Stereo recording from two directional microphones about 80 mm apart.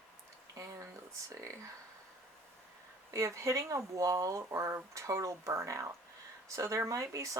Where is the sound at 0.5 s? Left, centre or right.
Right.